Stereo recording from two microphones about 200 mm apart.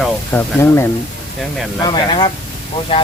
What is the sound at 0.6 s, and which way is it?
Speech, 15° left (ahead or behind).